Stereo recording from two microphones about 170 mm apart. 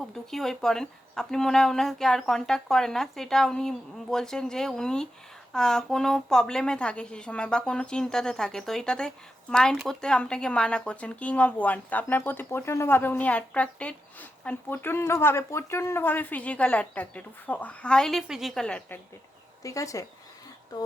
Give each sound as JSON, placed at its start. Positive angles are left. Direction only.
{"t": 0.0, "sound": "a woman's voice", "side_deg": 0}
{"t": 19.6, "sound": "speech", "side_deg": 20}